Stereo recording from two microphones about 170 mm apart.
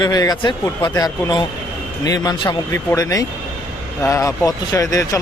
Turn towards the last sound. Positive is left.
turn(degrees=20)  # may be behind; listen again after turning